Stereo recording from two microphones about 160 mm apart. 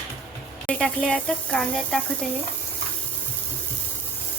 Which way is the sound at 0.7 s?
5° left (ahead or behind).